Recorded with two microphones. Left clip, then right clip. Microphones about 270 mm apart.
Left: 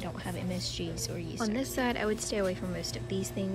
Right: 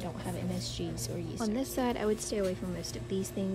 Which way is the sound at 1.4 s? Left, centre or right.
Centre.